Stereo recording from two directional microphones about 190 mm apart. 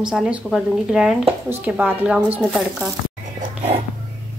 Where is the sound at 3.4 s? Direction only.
30° right (ahead or behind).